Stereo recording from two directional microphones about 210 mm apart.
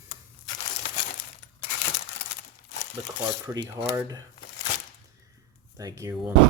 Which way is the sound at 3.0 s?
10° right (ahead or behind).